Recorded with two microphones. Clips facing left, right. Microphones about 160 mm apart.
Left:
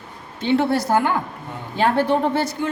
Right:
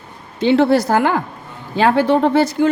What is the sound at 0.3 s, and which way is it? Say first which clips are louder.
Speech: right 6 dB; 90° right.